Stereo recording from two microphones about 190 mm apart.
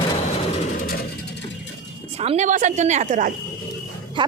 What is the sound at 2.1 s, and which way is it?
A woman's voice, 30° right (ahead or behind).